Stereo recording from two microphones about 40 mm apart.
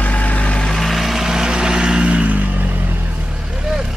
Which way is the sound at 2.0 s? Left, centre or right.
Right.